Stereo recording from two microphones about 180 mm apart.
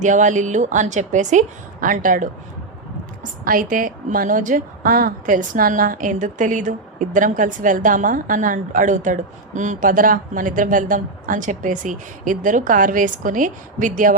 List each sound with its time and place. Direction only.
0.0 s a woman's voice: 45° right (ahead or behind)
3.4 s a woman's voice: 50° right (ahead or behind)